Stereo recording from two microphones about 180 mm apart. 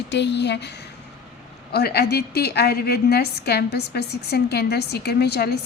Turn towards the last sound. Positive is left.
turn(degrees=65)  # may be behind; listen again after turning